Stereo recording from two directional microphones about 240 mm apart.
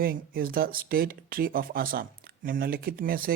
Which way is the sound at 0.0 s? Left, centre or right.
Right.